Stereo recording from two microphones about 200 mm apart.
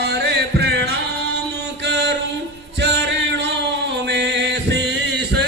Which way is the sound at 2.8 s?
60° right (ahead or behind).